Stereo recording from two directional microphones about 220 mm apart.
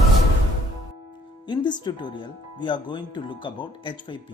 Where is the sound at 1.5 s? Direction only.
20° left (ahead or behind).